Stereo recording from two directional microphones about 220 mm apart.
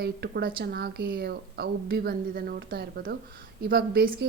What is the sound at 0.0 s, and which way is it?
A woman's voice, 50° right (ahead or behind).